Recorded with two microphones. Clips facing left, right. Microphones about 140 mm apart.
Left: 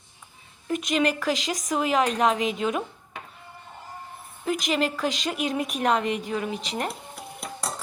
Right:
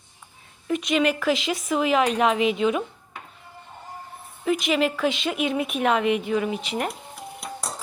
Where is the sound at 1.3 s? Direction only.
40° left (ahead or behind).